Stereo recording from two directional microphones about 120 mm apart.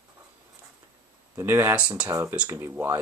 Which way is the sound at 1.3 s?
20° right (ahead or behind).